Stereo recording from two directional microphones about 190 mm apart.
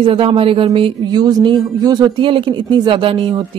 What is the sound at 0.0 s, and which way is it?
Speech, 30° right (ahead or behind).